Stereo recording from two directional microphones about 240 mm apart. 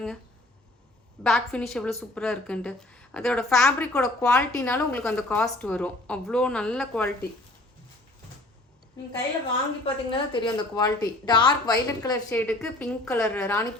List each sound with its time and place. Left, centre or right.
1.2 s a woman's voice: centre
9.8 s a woman's voice: left